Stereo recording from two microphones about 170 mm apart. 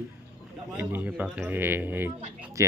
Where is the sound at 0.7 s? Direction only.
10° right (ahead or behind).